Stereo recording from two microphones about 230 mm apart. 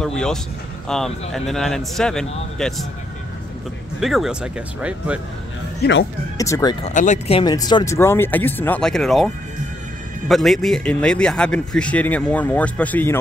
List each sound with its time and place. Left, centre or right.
0.0 s a man's voice: centre
4.0 s a man's voice: centre
5.8 s speech: left
6.3 s speech: centre
6.9 s a man's voice: left; by 13.2 s centre